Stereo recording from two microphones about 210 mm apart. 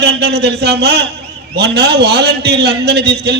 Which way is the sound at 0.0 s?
50° right (ahead or behind).